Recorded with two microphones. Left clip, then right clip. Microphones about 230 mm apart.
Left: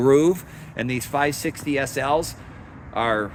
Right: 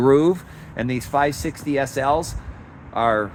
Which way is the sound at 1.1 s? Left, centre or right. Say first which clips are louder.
Right 3 dB; right.